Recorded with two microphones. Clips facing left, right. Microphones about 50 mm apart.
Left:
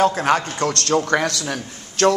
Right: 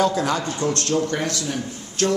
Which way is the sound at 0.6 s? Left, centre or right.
Left.